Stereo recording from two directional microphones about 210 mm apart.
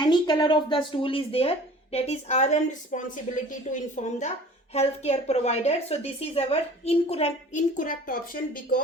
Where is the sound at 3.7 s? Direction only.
35° left (ahead or behind).